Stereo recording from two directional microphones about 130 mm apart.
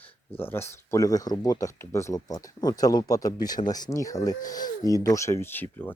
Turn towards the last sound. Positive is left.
turn(degrees=15)  # may be behind; listen again after turning